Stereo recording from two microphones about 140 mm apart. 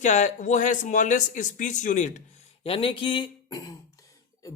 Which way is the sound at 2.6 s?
40° left (ahead or behind).